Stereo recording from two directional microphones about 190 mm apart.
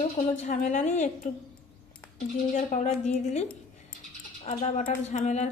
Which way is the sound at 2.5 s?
40° left (ahead or behind).